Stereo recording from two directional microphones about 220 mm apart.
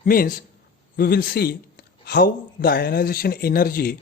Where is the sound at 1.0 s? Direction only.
40° left (ahead or behind).